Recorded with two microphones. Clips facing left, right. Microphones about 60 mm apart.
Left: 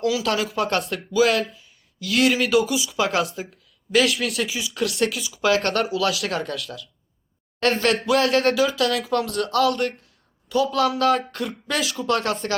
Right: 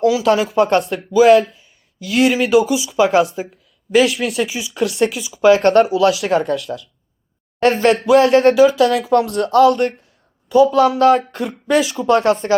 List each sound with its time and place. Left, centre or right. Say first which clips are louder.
0.0 s speech: right 8 dB; centre
6.0 s speech: right 8 dB; centre
6.3 s speech: right 10 dB; centre
7.6 s speech: right 6 dB; centre
7.9 s speech: right 9 dB; centre
11.3 s speech: right 9 dB; centre